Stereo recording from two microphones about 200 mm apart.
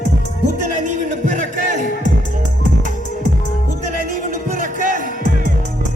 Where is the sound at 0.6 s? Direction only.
40° right (ahead or behind).